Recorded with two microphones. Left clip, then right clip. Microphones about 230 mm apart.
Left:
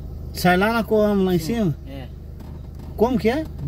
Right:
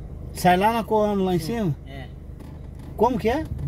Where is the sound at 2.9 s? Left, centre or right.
Centre.